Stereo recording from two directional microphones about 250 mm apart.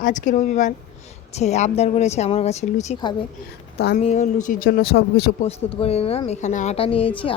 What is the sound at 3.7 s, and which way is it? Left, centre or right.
Speech, left.